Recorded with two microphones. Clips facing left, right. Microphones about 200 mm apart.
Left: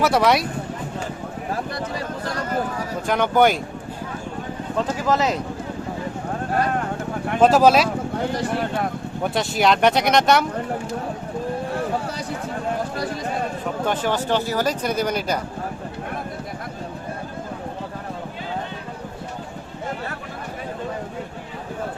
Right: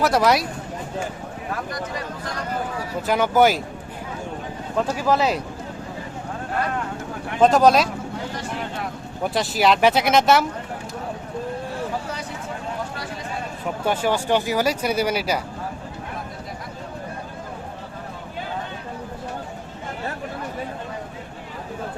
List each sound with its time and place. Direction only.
0.0 s speech: centre (ahead or behind)
1.5 s a sound: 30° left (ahead or behind)
3.1 s speech: 5° right (ahead or behind)
4.8 s speech: 10° right (ahead or behind)
7.4 s speech: 5° left (ahead or behind)
9.2 s speech: centre (ahead or behind)
13.8 s speech: 10° right (ahead or behind)